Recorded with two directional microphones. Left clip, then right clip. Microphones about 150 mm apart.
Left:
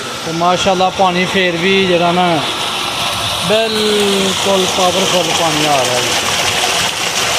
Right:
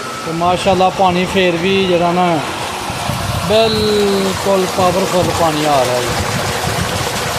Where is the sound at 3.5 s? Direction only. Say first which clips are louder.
Right 2 dB; 5° right (ahead or behind).